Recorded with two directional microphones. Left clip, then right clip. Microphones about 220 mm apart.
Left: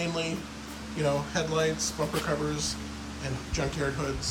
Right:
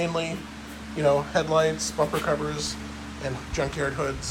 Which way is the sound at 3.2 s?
15° left (ahead or behind).